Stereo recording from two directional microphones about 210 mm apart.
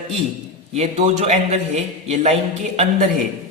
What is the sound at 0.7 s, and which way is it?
Speech, 30° right (ahead or behind).